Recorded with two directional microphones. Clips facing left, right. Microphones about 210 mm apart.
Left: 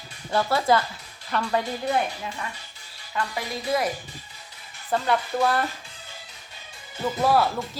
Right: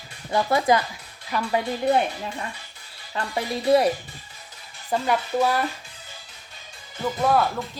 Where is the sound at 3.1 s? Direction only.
30° right (ahead or behind).